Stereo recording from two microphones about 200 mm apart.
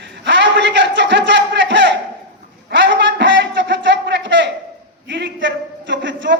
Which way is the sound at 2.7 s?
65° right (ahead or behind).